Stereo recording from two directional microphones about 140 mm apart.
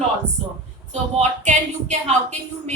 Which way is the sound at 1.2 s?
55° right (ahead or behind).